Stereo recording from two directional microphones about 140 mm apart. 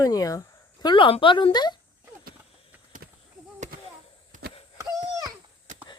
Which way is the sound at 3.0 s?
90° right.